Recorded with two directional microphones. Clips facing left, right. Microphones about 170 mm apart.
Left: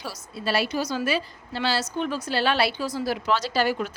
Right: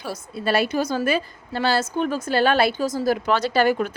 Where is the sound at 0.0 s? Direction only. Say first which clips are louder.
Right 4 dB; 55° right (ahead or behind).